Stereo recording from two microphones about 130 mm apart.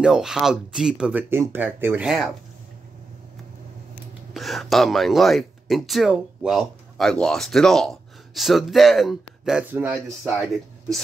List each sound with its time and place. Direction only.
0.0 s speech: 5° right (ahead or behind)
1.3 s speech: 20° right (ahead or behind)
2.0 s speech: centre (ahead or behind)
4.3 s speech: centre (ahead or behind)
9.7 s speech: 15° right (ahead or behind)